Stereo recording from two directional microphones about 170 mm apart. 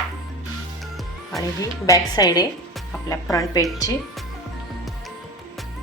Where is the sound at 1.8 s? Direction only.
20° left (ahead or behind).